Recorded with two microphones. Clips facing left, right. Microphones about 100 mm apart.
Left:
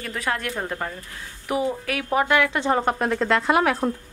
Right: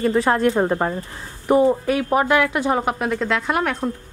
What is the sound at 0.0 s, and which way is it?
Speech, 30° right (ahead or behind).